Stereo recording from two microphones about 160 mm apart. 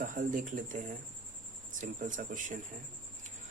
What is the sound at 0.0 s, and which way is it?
Speech, 55° right (ahead or behind).